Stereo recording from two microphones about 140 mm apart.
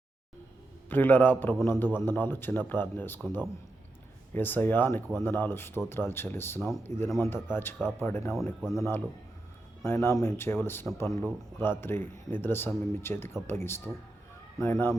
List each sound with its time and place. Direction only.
0.9 s speech: 15° left (ahead or behind)
4.4 s speech: 15° left (ahead or behind)